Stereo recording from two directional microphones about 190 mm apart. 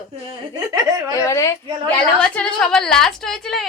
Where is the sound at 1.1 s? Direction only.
15° left (ahead or behind).